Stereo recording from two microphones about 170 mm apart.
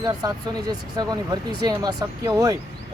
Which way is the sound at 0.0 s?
25° right (ahead or behind).